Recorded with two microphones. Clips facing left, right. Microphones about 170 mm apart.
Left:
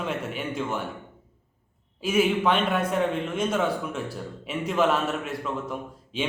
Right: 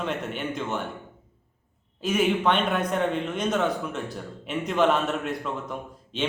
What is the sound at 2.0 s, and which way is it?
A man's voice, 5° left (ahead or behind).